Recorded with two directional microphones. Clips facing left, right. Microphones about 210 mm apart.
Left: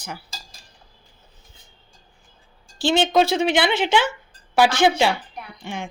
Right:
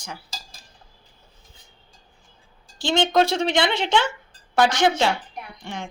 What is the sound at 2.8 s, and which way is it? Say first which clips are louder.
A woman's voice: left 2 dB; 5° left (ahead or behind).